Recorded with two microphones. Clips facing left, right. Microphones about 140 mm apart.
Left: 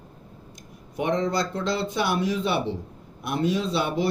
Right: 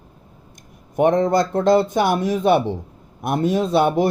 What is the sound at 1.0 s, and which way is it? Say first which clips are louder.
Speech: right 8 dB; 50° right (ahead or behind).